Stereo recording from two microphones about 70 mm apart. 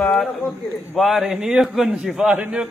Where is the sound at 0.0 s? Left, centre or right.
Centre.